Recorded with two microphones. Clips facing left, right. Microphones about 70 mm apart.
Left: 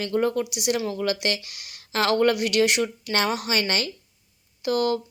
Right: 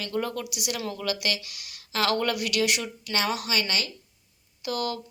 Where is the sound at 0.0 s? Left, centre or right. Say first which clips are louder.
Left 6 dB; left.